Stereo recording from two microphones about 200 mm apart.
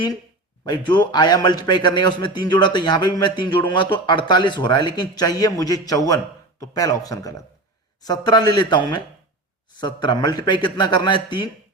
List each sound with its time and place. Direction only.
0.6 s a man's voice: 20° left (ahead or behind)